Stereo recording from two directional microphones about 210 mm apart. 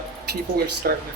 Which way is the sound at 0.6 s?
45° right (ahead or behind).